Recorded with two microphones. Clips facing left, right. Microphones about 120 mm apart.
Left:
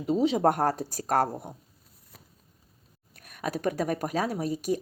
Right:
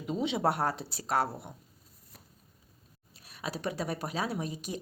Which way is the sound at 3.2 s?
50° left (ahead or behind).